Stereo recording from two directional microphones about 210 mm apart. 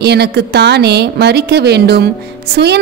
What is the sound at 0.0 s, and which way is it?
A woman's voice, 50° right (ahead or behind).